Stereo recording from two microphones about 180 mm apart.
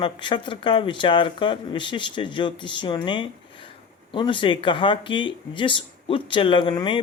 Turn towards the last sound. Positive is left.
turn(degrees=25)  # may be behind; listen again after turning